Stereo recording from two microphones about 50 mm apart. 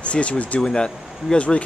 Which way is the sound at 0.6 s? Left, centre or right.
Centre.